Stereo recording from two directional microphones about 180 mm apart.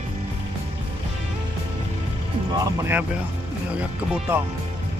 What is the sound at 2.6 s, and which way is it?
Speech, 15° right (ahead or behind).